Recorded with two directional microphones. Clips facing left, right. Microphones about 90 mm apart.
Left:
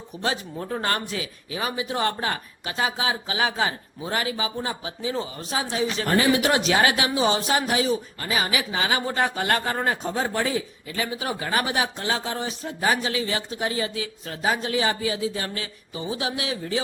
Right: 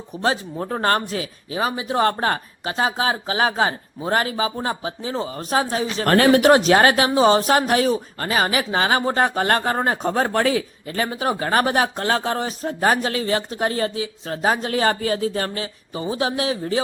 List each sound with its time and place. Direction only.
0.1 s speech: 35° right (ahead or behind)
6.1 s speech: 65° right (ahead or behind); by 10.1 s 35° right (ahead or behind)
10.1 s speech: 55° right (ahead or behind)
10.8 s speech: 45° right (ahead or behind)
13.9 s speech: 30° right (ahead or behind)
14.4 s speech: 45° right (ahead or behind)